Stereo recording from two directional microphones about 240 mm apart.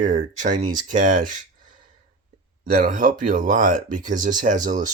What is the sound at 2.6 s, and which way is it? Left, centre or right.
Speech, right.